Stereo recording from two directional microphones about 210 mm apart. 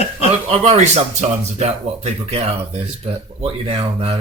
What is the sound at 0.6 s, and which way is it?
Speech, 30° right (ahead or behind).